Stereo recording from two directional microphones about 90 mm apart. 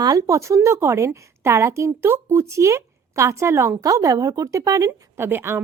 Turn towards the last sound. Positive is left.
turn(degrees=-25)  # may be behind; listen again after turning